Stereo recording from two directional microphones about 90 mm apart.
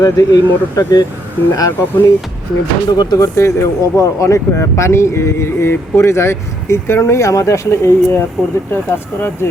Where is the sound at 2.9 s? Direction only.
45° left (ahead or behind).